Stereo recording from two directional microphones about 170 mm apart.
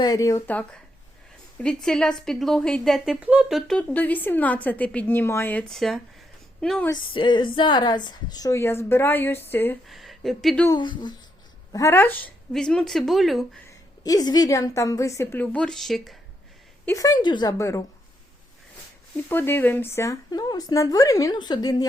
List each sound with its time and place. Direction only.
0.0 s a woman's voice: 20° left (ahead or behind); by 3.6 s 5° right (ahead or behind)
3.7 s a woman's voice: 10° left (ahead or behind)
6.9 s a woman's voice: 30° left (ahead or behind); by 9.7 s 10° left (ahead or behind)
9.8 s speech: centre (ahead or behind)
10.7 s a woman's voice: 25° left (ahead or behind); by 13.4 s centre (ahead or behind)
13.7 s a woman's voice: 20° left (ahead or behind); by 16.1 s centre (ahead or behind)
16.8 s a woman's voice: 20° left (ahead or behind)
19.3 s a woman's voice: 10° left (ahead or behind)